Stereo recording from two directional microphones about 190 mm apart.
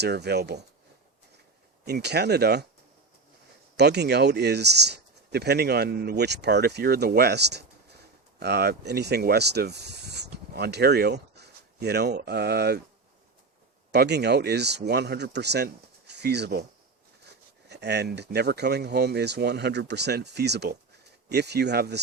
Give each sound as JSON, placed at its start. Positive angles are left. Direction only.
{"t": 0.0, "sound": "speech", "side_deg": -60}
{"t": 1.8, "sound": "speech", "side_deg": -60}
{"t": 3.8, "sound": "speech", "side_deg": -60}
{"t": 13.9, "sound": "speech", "side_deg": -60}